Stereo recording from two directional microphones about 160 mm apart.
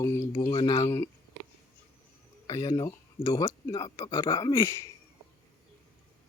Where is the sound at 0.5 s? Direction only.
30° left (ahead or behind).